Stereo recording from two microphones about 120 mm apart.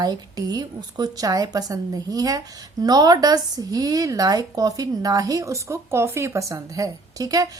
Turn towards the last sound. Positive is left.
turn(degrees=-30)  # may be behind; listen again after turning